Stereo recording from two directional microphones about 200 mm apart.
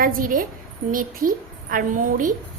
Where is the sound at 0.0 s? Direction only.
45° right (ahead or behind).